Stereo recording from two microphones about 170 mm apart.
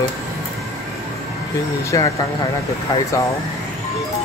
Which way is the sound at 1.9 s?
20° left (ahead or behind).